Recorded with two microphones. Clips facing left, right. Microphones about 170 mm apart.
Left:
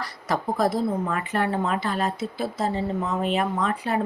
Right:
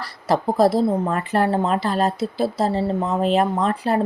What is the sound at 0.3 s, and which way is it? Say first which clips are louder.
Speech: right 6 dB; 35° right (ahead or behind).